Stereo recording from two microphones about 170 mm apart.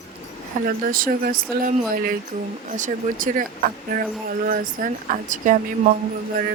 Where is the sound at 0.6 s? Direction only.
55° right (ahead or behind).